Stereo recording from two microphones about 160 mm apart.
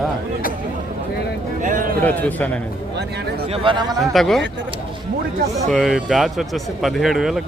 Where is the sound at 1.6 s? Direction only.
55° right (ahead or behind).